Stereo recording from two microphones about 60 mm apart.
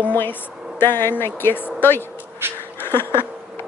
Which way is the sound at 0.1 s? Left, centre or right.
Left.